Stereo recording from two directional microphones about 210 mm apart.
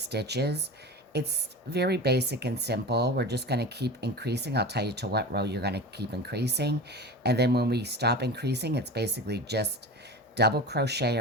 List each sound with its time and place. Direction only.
0.0 s speech: 50° right (ahead or behind)